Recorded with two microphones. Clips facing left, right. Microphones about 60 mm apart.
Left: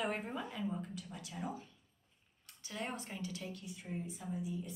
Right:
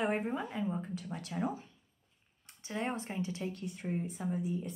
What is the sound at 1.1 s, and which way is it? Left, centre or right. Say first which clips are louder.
Speech: right 9 dB; right.